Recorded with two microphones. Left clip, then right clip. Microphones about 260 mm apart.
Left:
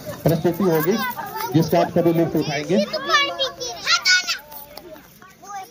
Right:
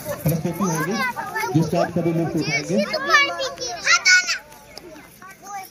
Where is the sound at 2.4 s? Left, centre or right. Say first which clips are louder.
Even; centre.